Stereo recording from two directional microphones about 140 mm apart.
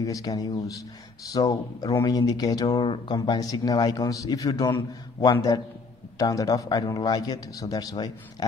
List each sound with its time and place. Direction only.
0.0 s speech: 25° left (ahead or behind)